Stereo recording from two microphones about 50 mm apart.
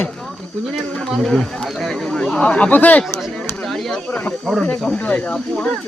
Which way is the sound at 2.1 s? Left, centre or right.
Centre.